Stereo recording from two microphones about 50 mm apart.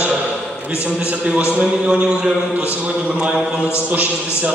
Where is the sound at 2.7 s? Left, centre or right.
Right.